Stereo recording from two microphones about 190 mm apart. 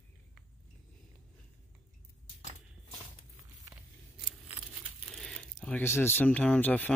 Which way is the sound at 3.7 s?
5° right (ahead or behind).